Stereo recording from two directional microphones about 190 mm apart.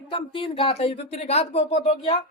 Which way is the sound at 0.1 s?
30° left (ahead or behind).